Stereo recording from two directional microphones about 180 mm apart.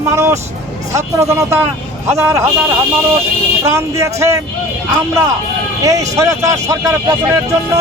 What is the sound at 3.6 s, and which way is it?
Speech, 15° right (ahead or behind).